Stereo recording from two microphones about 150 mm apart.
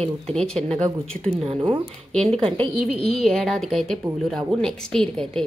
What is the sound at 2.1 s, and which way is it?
A woman's voice, 5° left (ahead or behind).